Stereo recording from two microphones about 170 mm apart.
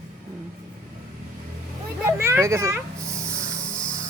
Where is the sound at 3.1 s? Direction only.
15° right (ahead or behind).